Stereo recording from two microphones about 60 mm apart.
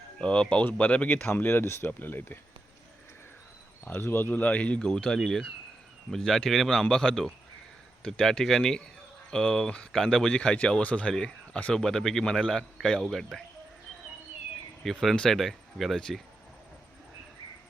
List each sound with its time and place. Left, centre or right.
0.2 s speech: centre
1.3 s speech: left
3.8 s a man's voice: left; by 13.2 s centre
14.8 s a man's voice: centre